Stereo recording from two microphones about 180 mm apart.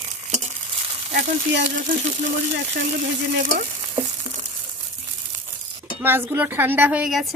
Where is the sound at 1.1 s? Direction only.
70° right (ahead or behind).